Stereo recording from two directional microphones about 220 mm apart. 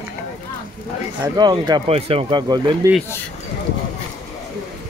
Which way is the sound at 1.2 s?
20° right (ahead or behind).